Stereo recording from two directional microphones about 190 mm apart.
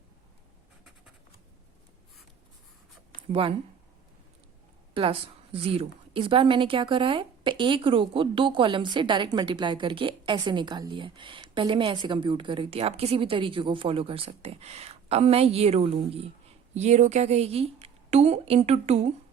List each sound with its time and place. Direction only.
4.9 s a woman's voice: 30° right (ahead or behind)